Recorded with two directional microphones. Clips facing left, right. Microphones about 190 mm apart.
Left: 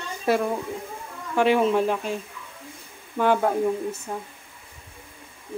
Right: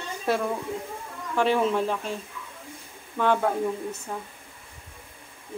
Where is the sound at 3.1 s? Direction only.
10° left (ahead or behind).